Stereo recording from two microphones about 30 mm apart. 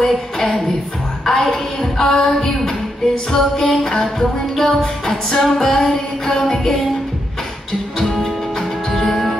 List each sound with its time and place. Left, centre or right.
0.1 s a sound: centre
1.2 s speech: centre
3.3 s music: centre
8.0 s music: centre